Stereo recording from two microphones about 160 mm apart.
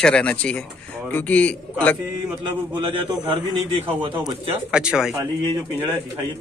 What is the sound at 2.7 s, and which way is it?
Speech, 30° right (ahead or behind).